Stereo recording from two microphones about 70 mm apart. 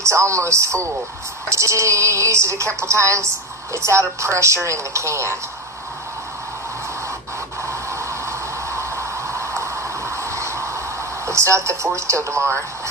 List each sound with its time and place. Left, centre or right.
0.0 s speech: right
7.6 s a sound: right
11.3 s speech: right